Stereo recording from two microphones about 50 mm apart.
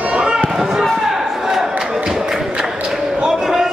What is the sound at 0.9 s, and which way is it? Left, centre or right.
Chop, centre.